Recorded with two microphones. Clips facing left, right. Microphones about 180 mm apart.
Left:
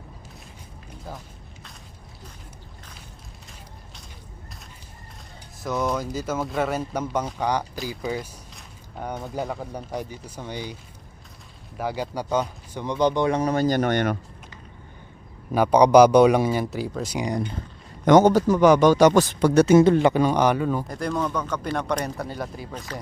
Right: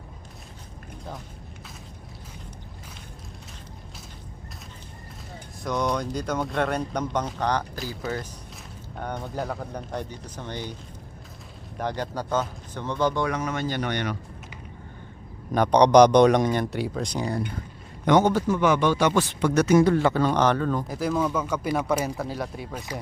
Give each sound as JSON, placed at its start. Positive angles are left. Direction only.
{"t": 5.6, "sound": "speech", "side_deg": 5}
{"t": 11.8, "sound": "speech", "side_deg": 5}
{"t": 15.5, "sound": "speech", "side_deg": 5}
{"t": 18.0, "sound": "speech", "side_deg": 45}
{"t": 20.8, "sound": "speech", "side_deg": -5}